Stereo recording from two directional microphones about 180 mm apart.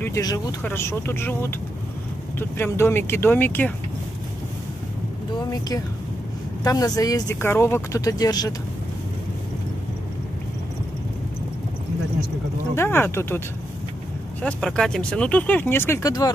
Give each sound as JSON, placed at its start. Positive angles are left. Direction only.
{"t": 0.0, "sound": "speech", "side_deg": 20}
{"t": 6.6, "sound": "speech", "side_deg": 20}
{"t": 12.7, "sound": "speech", "side_deg": 10}
{"t": 14.4, "sound": "speech", "side_deg": 5}